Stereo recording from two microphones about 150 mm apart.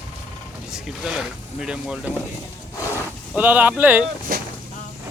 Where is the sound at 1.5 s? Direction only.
5° right (ahead or behind).